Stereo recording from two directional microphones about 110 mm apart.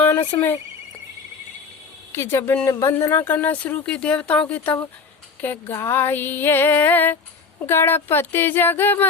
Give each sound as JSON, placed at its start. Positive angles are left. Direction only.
{"t": 0.3, "sound": "speech", "side_deg": 35}
{"t": 2.1, "sound": "speech", "side_deg": 20}